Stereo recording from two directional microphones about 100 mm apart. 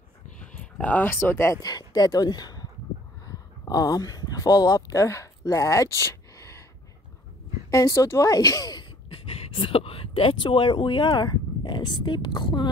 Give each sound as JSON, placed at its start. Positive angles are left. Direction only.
{"t": 0.4, "sound": "speech", "side_deg": 10}
{"t": 1.6, "sound": "speech", "side_deg": 40}
{"t": 3.3, "sound": "a sound", "side_deg": 40}
{"t": 7.7, "sound": "speech", "side_deg": 35}
{"t": 9.1, "sound": "speech", "side_deg": 75}